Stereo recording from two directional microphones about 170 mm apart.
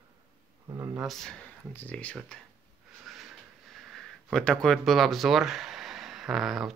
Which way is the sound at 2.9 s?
Centre (ahead or behind).